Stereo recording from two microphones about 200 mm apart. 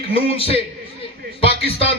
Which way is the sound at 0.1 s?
30° left (ahead or behind).